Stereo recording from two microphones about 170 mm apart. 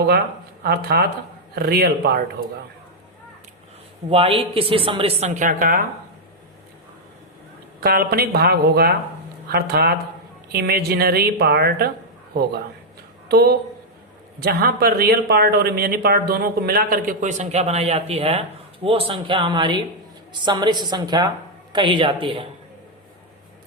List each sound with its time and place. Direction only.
0.6 s a woman's voice: 70° right (ahead or behind)
4.1 s a woman's voice: 35° right (ahead or behind); by 5.8 s 50° right (ahead or behind)
7.8 s a woman's voice: 65° right (ahead or behind)
13.2 s a woman's voice: 65° right (ahead or behind); by 22.4 s 30° right (ahead or behind)